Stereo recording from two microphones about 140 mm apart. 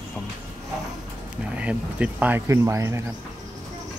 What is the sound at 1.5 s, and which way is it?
Speech, 10° right (ahead or behind).